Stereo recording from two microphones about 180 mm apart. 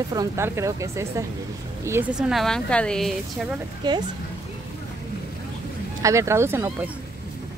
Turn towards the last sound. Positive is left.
turn(degrees=-15)  # may be behind; listen again after turning